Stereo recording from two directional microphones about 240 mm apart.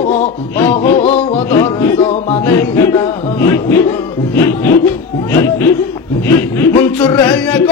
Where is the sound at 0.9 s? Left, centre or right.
Left.